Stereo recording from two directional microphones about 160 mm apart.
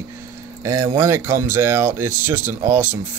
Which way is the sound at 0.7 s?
15° right (ahead or behind).